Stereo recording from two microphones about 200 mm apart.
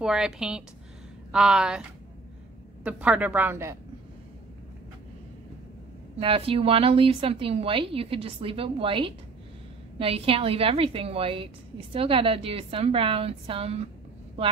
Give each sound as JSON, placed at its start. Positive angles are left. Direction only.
{"t": 0.0, "sound": "a woman's voice", "side_deg": -5}
{"t": 6.1, "sound": "a woman's voice", "side_deg": -30}